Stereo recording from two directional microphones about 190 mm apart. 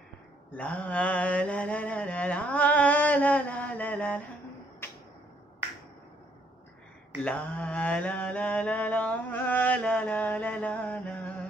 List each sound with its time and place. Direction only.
0.5 s mantra: 5° left (ahead or behind)
7.2 s mantra: 5° left (ahead or behind)